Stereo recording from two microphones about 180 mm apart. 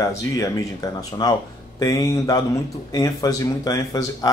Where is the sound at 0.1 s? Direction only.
20° left (ahead or behind).